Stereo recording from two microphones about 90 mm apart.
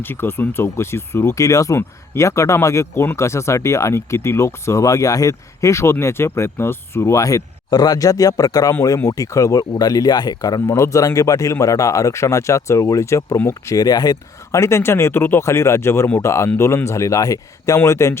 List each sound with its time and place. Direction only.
0.0 s speech: 25° left (ahead or behind); by 10.6 s 50° left (ahead or behind)
10.7 s speech: 35° left (ahead or behind)
14.6 s speech: 30° left (ahead or behind)